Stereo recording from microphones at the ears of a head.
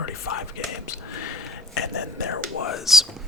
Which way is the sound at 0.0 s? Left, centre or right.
Left.